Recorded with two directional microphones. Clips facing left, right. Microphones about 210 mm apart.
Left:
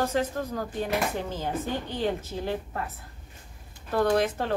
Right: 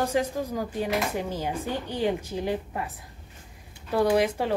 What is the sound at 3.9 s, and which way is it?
Speech, 10° right (ahead or behind).